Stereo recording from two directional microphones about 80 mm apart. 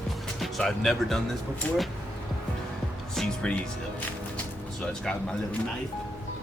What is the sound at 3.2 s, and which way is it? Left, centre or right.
Music, centre.